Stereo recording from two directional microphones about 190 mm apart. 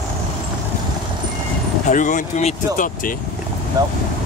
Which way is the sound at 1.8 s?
40° left (ahead or behind).